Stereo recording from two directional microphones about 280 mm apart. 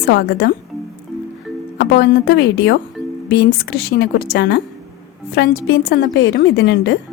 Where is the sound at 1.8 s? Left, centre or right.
Left.